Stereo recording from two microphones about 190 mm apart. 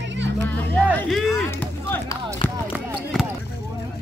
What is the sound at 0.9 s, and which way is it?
Speech, centre (ahead or behind).